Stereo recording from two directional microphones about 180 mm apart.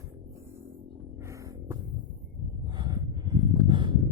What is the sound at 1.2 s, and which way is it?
Music, 15° right (ahead or behind).